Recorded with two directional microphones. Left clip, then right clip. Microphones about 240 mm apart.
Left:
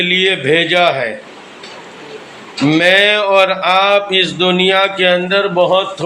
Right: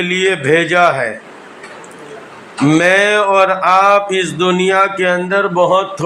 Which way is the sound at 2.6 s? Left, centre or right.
Right.